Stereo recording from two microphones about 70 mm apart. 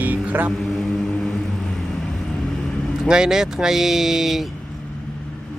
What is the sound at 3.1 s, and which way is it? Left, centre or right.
Speech, centre.